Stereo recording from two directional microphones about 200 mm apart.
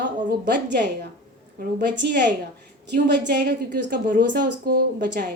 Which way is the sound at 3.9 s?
40° right (ahead or behind).